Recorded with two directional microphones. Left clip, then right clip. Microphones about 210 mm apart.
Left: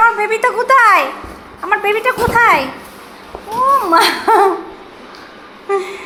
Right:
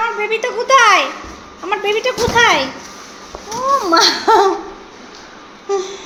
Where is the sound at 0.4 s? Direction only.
5° right (ahead or behind).